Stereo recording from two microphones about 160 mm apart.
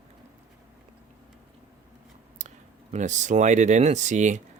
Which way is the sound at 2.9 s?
50° right (ahead or behind).